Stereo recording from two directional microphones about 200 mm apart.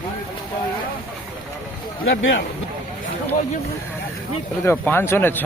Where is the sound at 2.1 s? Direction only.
70° left (ahead or behind).